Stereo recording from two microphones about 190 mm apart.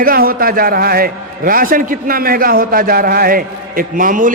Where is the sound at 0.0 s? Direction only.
50° right (ahead or behind).